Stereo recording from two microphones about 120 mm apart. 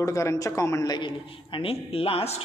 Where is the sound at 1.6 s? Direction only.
50° left (ahead or behind).